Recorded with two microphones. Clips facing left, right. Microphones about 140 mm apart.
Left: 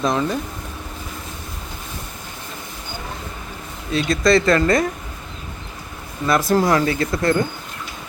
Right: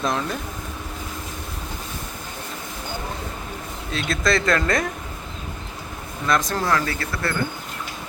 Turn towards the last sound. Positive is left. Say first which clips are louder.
# left 8 dB
turn(degrees=20)  # may be behind; listen again after turning